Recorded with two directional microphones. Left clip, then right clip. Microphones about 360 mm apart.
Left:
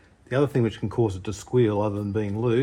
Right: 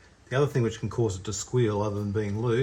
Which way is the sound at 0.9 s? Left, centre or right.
Left.